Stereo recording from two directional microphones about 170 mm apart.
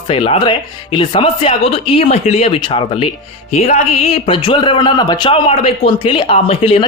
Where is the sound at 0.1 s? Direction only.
35° left (ahead or behind).